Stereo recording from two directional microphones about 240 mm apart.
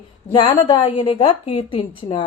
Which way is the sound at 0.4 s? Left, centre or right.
Left.